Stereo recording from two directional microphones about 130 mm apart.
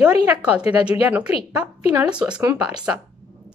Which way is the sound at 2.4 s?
25° right (ahead or behind).